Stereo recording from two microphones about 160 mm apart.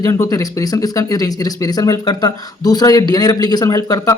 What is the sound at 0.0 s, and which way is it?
Speech, 20° left (ahead or behind).